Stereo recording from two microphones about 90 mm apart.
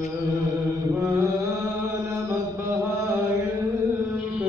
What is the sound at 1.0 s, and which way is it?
Mantra, 30° right (ahead or behind).